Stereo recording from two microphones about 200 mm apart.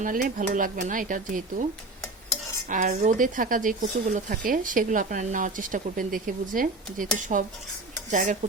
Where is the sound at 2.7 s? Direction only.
35° right (ahead or behind).